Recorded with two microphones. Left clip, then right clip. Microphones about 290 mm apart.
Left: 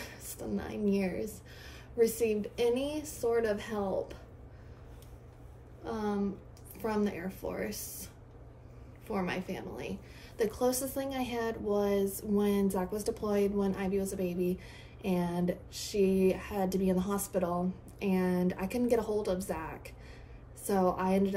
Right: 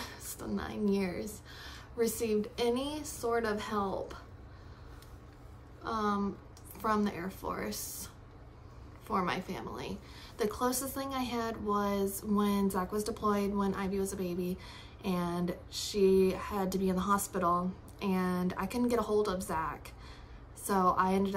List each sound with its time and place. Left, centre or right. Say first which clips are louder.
0.0 s a woman's voice: even; centre
5.9 s a woman's voice: right 2 dB; centre
10.7 s speech: left 3 dB; right
11.0 s speech: left 1 dB; centre